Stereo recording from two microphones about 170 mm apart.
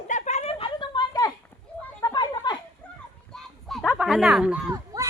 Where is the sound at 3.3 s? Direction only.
5° left (ahead or behind).